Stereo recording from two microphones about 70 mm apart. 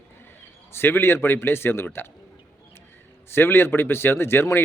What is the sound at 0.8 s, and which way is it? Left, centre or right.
A man's voice, left.